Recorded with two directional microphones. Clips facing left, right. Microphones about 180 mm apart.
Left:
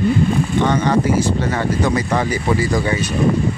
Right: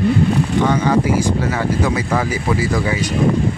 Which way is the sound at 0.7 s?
10° right (ahead or behind).